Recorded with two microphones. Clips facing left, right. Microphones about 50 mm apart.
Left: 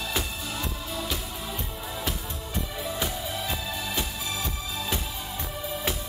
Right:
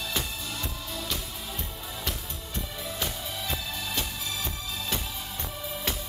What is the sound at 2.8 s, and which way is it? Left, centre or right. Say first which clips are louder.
Music: left 3 dB; centre.